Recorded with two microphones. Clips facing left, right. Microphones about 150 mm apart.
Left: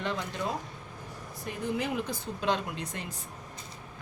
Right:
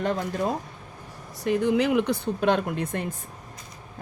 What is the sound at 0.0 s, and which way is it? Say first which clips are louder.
Speech: right 7 dB; 45° right (ahead or behind).